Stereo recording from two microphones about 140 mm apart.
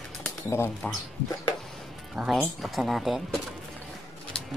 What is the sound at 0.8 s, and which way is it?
Speech, 10° left (ahead or behind).